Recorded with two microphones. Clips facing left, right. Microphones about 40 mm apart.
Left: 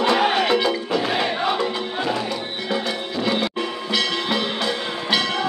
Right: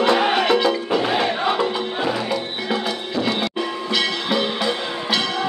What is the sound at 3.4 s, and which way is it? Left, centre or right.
Music, centre.